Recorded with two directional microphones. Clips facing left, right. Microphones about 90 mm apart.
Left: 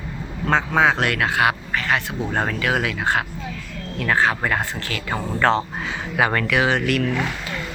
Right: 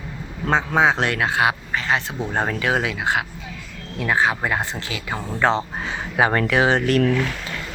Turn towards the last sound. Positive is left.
turn(degrees=5)  # may be behind; listen again after turning